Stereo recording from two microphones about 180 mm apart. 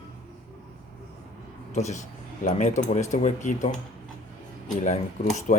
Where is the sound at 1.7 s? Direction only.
40° left (ahead or behind).